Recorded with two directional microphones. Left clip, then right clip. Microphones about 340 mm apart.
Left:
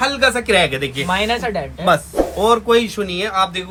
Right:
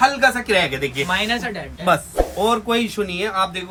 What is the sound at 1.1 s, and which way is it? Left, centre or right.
Speech, centre.